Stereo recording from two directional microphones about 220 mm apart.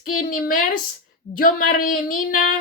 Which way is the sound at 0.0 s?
40° left (ahead or behind).